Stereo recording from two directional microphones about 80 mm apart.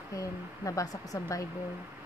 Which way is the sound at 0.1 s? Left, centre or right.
Left.